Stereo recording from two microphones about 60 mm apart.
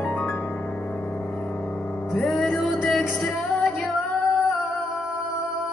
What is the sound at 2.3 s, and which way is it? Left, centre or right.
Music, centre.